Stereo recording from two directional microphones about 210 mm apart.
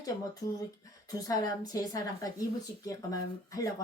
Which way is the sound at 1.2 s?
15° left (ahead or behind).